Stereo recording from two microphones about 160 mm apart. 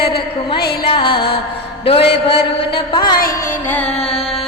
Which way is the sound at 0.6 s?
80° left.